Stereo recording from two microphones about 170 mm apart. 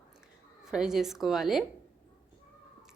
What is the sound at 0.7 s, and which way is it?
Speech, 5° right (ahead or behind).